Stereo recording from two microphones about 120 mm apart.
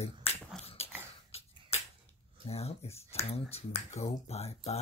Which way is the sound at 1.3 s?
55° left (ahead or behind).